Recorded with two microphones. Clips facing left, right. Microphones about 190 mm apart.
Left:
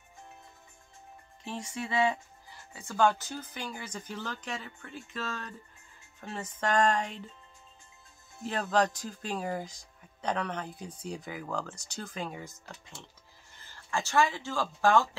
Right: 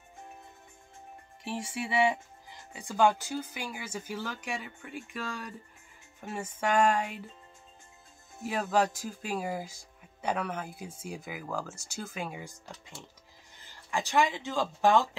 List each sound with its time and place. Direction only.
1.4 s speech: 15° right (ahead or behind)
8.4 s speech: 10° right (ahead or behind)